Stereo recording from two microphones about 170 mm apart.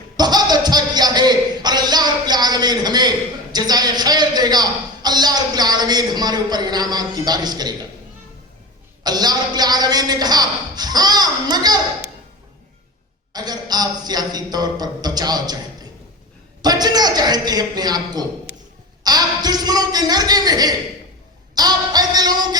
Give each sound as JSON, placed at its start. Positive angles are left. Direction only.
{"t": 0.2, "sound": "a sound", "side_deg": -25}
{"t": 3.5, "sound": "a man's voice", "side_deg": -25}
{"t": 9.0, "sound": "a man's voice", "side_deg": -25}
{"t": 13.3, "sound": "a man's voice", "side_deg": -25}